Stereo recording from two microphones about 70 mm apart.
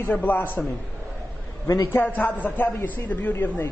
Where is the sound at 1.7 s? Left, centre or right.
Left.